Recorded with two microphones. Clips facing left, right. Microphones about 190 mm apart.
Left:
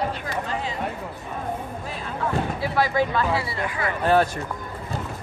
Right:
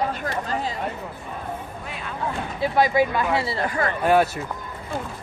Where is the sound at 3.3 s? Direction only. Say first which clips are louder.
Right 3 dB; 30° right (ahead or behind).